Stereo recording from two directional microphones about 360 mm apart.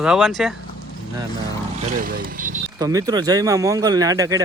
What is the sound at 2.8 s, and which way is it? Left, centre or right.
Speech, centre.